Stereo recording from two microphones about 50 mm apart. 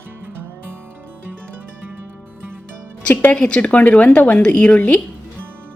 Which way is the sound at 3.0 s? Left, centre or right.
Left.